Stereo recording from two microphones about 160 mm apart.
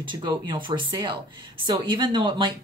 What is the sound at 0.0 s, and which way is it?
Speech, 30° right (ahead or behind).